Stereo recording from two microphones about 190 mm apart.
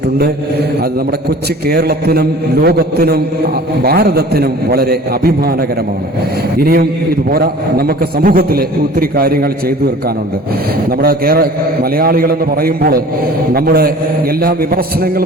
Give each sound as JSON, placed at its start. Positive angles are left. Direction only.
{"t": 1.6, "sound": "a man's voice", "side_deg": -55}
{"t": 10.9, "sound": "a man's voice", "side_deg": -55}